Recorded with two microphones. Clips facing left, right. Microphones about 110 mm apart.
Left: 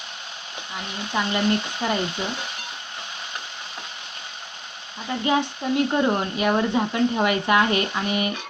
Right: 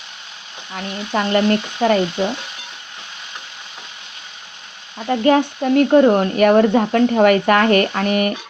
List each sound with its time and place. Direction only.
1.1 s speech: 65° right (ahead or behind)
5.0 s speech: 60° right (ahead or behind)